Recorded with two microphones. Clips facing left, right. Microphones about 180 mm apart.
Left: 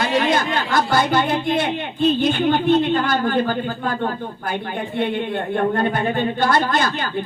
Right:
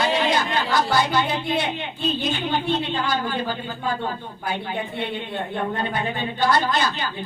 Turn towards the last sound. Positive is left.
turn(degrees=50)  # may be behind; listen again after turning